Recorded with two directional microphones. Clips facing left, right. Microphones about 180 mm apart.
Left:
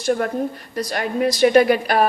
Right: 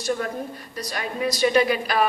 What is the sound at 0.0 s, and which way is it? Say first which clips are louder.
A woman's voice: left 6 dB; 55° left (ahead or behind).